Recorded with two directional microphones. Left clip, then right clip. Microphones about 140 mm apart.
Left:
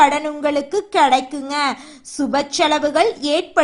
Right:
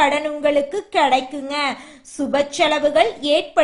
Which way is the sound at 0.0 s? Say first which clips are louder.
Left 2 dB; 30° left (ahead or behind).